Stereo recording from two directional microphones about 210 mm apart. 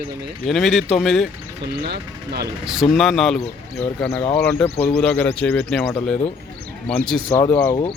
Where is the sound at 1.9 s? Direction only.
50° right (ahead or behind).